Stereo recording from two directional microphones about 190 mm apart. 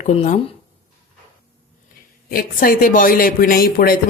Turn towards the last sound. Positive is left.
turn(degrees=50)  # may be behind; listen again after turning